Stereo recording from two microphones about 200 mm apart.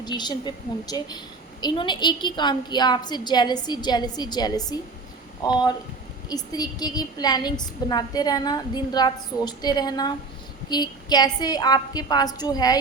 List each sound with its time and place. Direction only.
0.0 s a woman's voice: 20° left (ahead or behind)